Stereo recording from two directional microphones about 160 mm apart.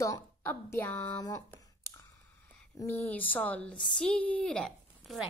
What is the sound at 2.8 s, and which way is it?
Speech, 10° left (ahead or behind).